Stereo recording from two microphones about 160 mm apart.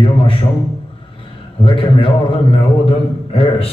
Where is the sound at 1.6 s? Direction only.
35° left (ahead or behind).